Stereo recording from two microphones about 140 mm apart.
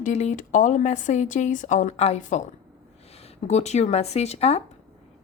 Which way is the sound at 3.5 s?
50° left (ahead or behind).